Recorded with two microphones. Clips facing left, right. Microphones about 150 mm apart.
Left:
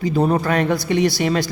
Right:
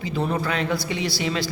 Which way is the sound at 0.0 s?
40° left (ahead or behind).